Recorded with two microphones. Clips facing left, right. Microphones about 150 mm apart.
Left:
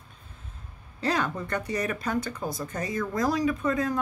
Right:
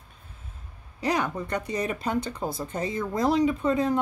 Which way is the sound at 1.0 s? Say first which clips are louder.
Right 1 dB; 15° right (ahead or behind).